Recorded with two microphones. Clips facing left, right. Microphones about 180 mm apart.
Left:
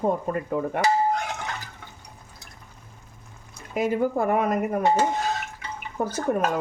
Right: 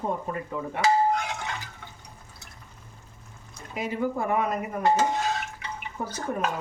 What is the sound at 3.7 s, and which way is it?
Speech, 50° left (ahead or behind).